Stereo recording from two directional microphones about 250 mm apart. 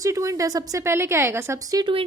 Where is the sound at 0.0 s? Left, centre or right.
Centre.